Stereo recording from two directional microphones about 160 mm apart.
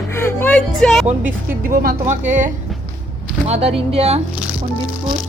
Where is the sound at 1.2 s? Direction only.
60° right (ahead or behind).